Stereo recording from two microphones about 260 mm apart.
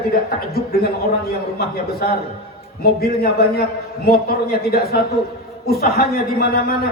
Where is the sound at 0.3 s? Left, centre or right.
Left.